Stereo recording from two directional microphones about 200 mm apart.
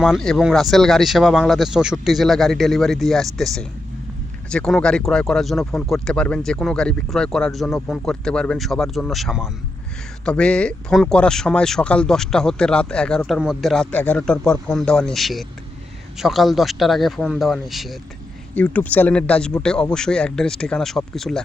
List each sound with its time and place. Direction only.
0.0 s speech: centre (ahead or behind)